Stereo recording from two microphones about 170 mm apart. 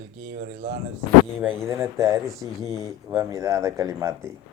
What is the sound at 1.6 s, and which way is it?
Speech, 15° right (ahead or behind).